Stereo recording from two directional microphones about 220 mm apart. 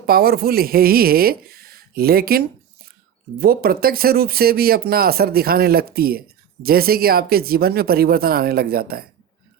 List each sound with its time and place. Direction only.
0.0 s speech: 45° right (ahead or behind)
3.4 s speech: 45° right (ahead or behind)